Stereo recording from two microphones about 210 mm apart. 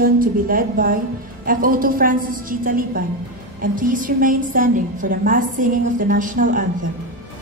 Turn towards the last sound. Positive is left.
turn(degrees=-40)  # may be behind; listen again after turning